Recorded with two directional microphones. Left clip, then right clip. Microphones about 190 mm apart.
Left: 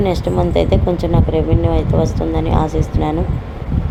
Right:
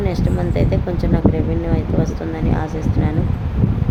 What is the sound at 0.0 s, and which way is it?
Speech, 20° left (ahead or behind).